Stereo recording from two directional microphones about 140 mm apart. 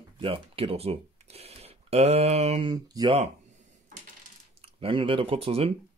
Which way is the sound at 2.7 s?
30° right (ahead or behind).